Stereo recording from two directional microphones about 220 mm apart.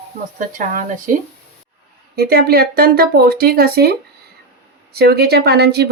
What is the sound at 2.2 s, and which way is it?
Speech, 45° right (ahead or behind).